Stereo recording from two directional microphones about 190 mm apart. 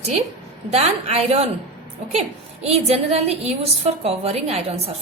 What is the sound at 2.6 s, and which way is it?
A woman's voice, 35° right (ahead or behind).